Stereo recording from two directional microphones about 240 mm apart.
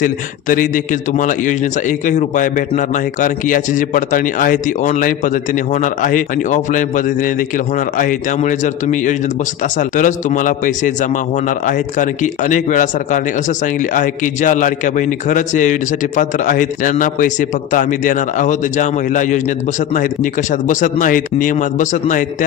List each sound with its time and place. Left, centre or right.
0.0 s a man's voice: left